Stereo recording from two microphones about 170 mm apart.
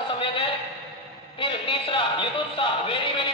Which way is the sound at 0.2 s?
30° left (ahead or behind).